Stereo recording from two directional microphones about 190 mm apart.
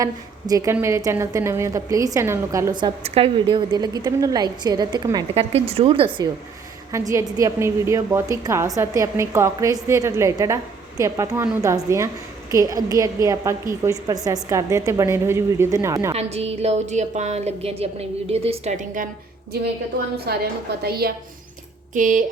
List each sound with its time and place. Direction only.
0.0 s a woman's voice: 20° right (ahead or behind)
3.0 s a woman's voice: 30° right (ahead or behind)
5.3 s a woman's voice: 30° right (ahead or behind)
6.9 s a woman's voice: 15° right (ahead or behind)
16.1 s a woman's voice: 35° right (ahead or behind)
20.1 s a woman's voice: 55° right (ahead or behind)
21.9 s speech: 45° right (ahead or behind)